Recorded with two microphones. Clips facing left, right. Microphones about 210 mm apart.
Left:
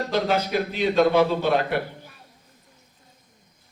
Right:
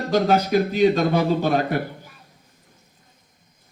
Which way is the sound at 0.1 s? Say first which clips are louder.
Right 6 dB; 45° right (ahead or behind).